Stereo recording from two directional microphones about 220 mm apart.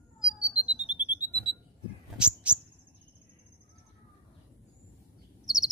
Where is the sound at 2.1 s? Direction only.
5° right (ahead or behind).